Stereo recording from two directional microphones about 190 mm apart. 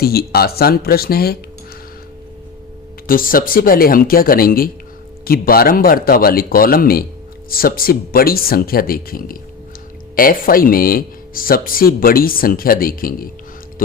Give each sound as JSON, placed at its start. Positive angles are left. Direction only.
{"t": 0.0, "sound": "speech", "side_deg": 55}
{"t": 3.1, "sound": "speech", "side_deg": 50}